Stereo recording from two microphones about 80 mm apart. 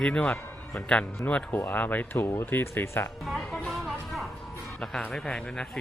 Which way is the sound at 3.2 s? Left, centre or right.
Centre.